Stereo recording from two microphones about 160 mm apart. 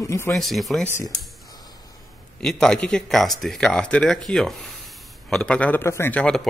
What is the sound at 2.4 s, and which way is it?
A man's voice, 5° left (ahead or behind).